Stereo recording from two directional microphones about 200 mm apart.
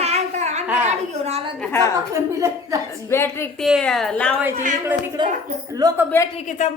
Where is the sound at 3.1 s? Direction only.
10° left (ahead or behind).